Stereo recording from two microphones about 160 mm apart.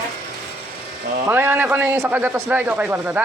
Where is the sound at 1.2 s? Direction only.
15° right (ahead or behind).